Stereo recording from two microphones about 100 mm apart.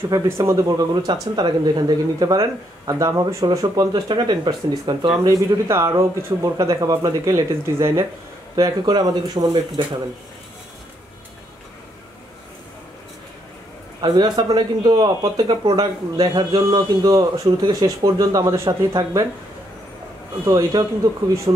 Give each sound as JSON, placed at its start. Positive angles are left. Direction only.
{"t": 0.1, "sound": "speech", "side_deg": -35}
{"t": 5.7, "sound": "speech", "side_deg": -25}
{"t": 6.6, "sound": "speech", "side_deg": -35}
{"t": 14.0, "sound": "speech", "side_deg": -45}
{"t": 20.4, "sound": "speech", "side_deg": -35}